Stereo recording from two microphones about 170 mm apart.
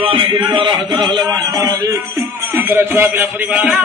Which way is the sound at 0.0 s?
30° right (ahead or behind).